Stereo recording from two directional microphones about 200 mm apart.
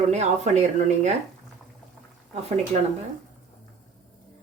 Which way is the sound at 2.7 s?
35° right (ahead or behind).